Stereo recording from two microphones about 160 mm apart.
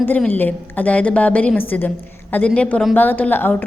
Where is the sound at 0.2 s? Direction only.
10° left (ahead or behind).